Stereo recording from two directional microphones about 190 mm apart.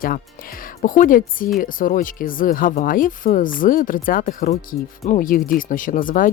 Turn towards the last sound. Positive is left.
turn(degrees=45)  # may be behind; listen again after turning